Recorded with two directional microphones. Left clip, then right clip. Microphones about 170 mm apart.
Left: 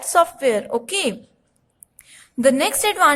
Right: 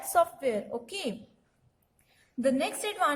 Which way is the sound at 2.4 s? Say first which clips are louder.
Left 11 dB; 30° left (ahead or behind).